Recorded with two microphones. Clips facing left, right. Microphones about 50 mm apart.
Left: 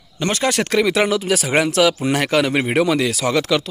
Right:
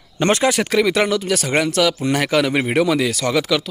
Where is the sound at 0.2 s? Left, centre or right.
Right.